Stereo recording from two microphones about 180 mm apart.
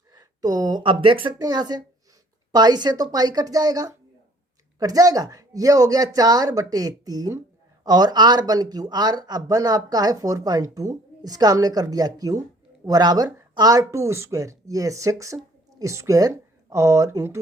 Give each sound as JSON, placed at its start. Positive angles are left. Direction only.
{"t": 0.1, "sound": "speech", "side_deg": -20}